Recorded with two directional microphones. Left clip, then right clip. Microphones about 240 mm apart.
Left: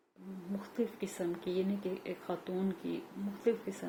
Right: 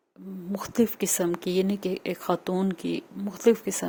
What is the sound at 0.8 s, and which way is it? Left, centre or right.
Speech, right.